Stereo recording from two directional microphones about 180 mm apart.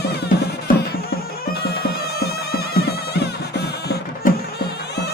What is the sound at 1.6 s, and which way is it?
Music, 60° left (ahead or behind).